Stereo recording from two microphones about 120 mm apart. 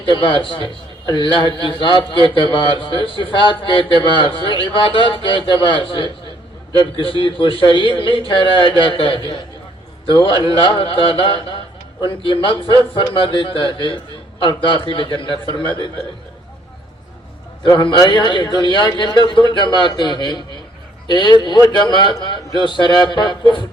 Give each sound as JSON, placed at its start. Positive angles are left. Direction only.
{"t": 0.0, "sound": "a man's voice", "side_deg": 45}
{"t": 17.6, "sound": "a man's voice", "side_deg": 40}